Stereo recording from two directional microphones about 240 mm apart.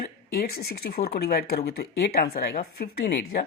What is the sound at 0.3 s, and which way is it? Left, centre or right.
Speech, left.